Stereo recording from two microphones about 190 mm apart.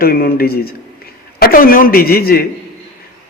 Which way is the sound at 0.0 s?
50° left (ahead or behind).